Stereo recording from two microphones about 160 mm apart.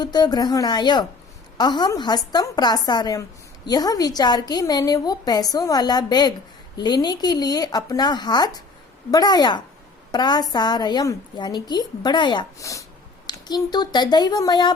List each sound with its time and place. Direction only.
0.0 s a woman's voice: 25° left (ahead or behind)